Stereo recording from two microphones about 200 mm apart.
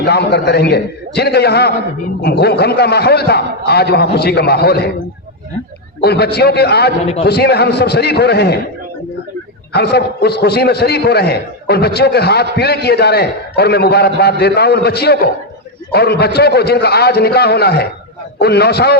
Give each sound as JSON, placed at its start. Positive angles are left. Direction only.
{"t": 0.0, "sound": "a man's voice", "side_deg": 55}
{"t": 6.0, "sound": "a man's voice", "side_deg": 55}
{"t": 7.0, "sound": "a man's voice", "side_deg": 30}
{"t": 7.3, "sound": "a man's voice", "side_deg": 55}
{"t": 9.7, "sound": "a man's voice", "side_deg": 55}